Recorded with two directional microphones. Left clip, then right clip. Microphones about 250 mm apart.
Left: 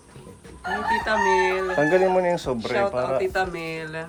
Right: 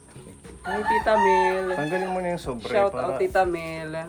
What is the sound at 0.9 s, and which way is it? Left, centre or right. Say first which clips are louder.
Speech: right 2 dB; right.